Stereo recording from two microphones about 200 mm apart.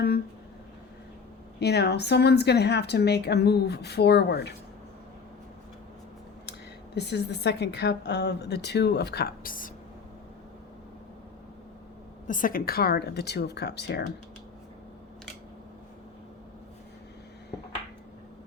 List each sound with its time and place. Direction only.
1.5 s a woman's voice: 55° left (ahead or behind)
6.9 s a woman's voice: 55° left (ahead or behind)
12.3 s a woman's voice: 45° left (ahead or behind)